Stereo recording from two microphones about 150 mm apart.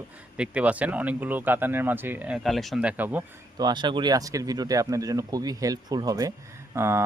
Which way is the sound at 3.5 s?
30° right (ahead or behind).